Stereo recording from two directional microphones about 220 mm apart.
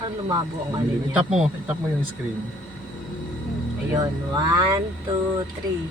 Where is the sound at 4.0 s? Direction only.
20° right (ahead or behind).